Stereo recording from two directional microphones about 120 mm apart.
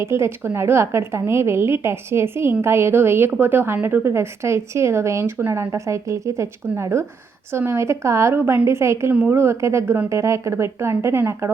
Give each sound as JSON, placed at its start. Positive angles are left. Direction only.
{"t": 0.0, "sound": "a woman's voice", "side_deg": -20}